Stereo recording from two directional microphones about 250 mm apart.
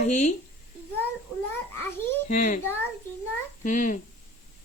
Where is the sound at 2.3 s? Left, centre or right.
Left.